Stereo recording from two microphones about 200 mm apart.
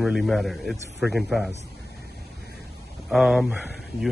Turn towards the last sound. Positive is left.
turn(degrees=0)  # may be behind; listen again after turning